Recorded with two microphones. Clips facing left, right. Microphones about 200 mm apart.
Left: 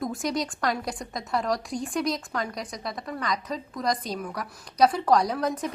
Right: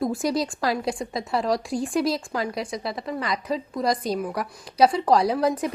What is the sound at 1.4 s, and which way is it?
Speech, 30° right (ahead or behind).